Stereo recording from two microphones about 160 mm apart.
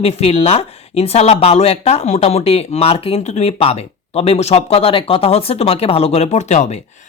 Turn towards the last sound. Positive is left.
turn(degrees=45)  # may be behind; listen again after turning